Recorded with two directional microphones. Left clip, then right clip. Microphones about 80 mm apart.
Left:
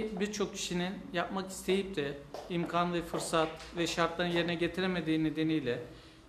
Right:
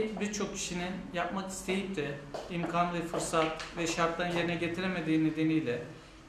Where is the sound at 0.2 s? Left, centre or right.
Right.